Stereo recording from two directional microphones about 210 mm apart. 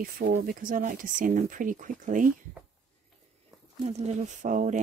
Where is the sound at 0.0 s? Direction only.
45° right (ahead or behind).